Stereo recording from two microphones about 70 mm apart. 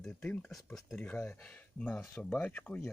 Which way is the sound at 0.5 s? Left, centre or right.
Centre.